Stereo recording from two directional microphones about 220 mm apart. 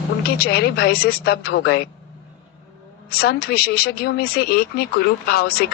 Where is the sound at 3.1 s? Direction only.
45° left (ahead or behind).